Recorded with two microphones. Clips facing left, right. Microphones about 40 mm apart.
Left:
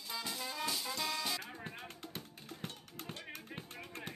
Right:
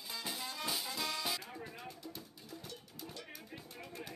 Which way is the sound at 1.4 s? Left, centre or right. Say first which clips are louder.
Left 1 dB; left.